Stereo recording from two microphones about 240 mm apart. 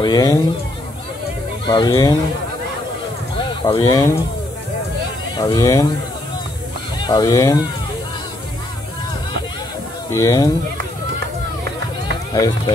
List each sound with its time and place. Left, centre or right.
0.0 s speech: centre
1.7 s speech: centre
3.4 s speech: centre
5.4 s speech: centre
7.0 s speech: centre
10.1 s speech: centre
12.3 s speech: centre